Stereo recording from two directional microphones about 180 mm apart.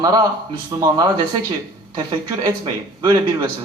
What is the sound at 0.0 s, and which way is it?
A man's voice, 20° right (ahead or behind).